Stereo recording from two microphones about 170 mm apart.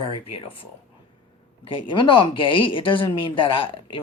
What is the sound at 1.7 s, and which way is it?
Speech, 30° left (ahead or behind).